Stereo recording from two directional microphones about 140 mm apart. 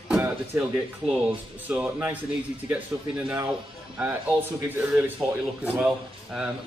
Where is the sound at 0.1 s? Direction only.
15° right (ahead or behind).